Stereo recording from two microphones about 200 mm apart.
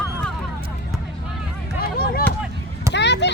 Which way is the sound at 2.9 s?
60° left (ahead or behind).